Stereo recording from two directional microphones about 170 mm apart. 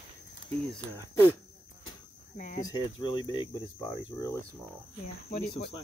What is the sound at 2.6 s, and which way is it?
Speech, 25° left (ahead or behind).